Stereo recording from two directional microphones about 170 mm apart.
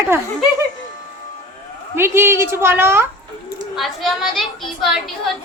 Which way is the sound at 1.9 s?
15° right (ahead or behind).